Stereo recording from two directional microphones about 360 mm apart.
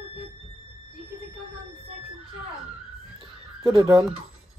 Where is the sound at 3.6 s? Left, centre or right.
Centre.